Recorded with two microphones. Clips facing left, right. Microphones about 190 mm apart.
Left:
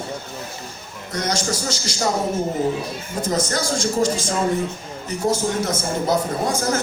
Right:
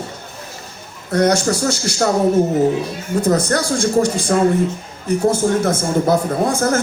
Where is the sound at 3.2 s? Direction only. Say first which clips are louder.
Right 5 dB; 60° right (ahead or behind).